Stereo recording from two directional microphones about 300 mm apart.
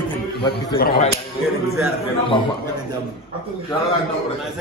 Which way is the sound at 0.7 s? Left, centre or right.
Left.